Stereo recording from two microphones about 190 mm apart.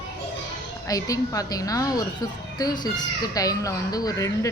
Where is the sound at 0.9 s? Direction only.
20° left (ahead or behind).